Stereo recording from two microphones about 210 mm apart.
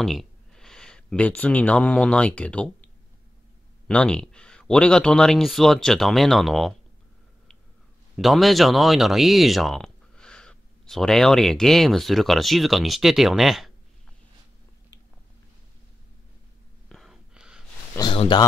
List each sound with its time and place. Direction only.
0.0 s speech: centre (ahead or behind)
3.8 s speech: 5° left (ahead or behind)
8.2 s speech: centre (ahead or behind)
16.9 s gasp: centre (ahead or behind)
17.9 s a sound: 25° left (ahead or behind)